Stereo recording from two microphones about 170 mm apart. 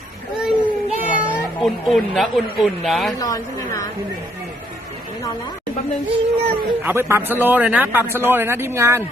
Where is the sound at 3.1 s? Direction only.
20° left (ahead or behind).